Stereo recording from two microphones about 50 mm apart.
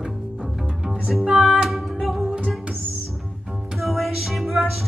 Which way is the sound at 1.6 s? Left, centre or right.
Centre.